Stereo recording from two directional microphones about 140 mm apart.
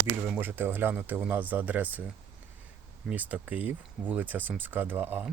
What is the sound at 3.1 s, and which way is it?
Speech, 10° right (ahead or behind).